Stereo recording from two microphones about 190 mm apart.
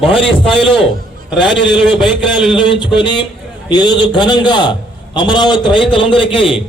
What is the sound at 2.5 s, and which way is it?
A man's voice, 25° left (ahead or behind).